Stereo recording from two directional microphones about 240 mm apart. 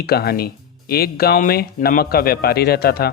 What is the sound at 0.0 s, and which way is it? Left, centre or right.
A man's voice, left.